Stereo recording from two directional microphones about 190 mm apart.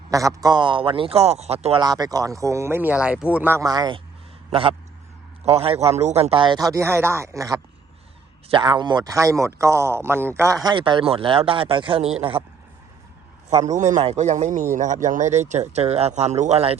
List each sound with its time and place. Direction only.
0.1 s a man's voice: 15° right (ahead or behind); by 1.8 s 30° right (ahead or behind)
1.8 s speech: 20° right (ahead or behind)
5.5 s a man's voice: 30° right (ahead or behind)
13.7 s speech: 40° right (ahead or behind)